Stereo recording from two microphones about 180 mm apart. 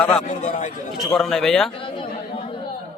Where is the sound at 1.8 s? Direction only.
30° left (ahead or behind).